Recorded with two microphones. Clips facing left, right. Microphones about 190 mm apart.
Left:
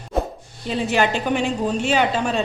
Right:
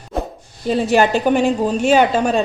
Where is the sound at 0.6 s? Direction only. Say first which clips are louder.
Right 5 dB; 40° right (ahead or behind).